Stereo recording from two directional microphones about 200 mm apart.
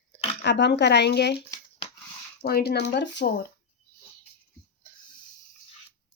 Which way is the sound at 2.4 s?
50° left (ahead or behind).